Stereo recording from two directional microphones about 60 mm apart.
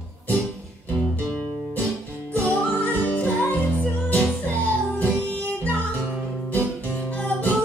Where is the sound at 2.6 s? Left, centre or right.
Left.